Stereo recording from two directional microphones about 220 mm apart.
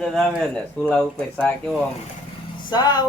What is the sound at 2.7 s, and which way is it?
Speech, 20° left (ahead or behind).